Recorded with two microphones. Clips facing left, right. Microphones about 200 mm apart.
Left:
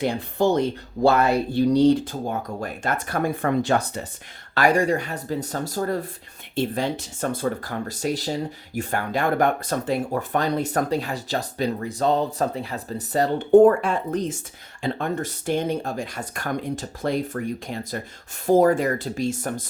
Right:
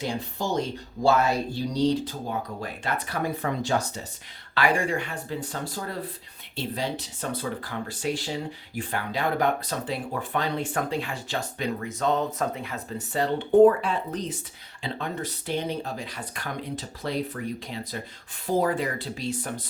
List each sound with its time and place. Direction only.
0.0 s speech: 60° left (ahead or behind)
4.5 s speech: 40° left (ahead or behind)